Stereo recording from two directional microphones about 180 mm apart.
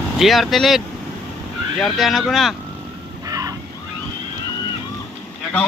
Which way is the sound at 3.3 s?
20° right (ahead or behind).